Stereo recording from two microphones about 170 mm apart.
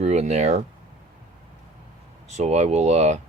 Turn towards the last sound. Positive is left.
turn(degrees=-40)  # may be behind; listen again after turning